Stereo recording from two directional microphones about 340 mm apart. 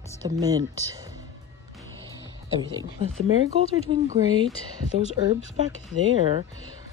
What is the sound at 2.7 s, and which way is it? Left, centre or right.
Speech, centre.